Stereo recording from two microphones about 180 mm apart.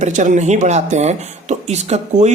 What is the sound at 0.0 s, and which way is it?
Speech, 45° right (ahead or behind).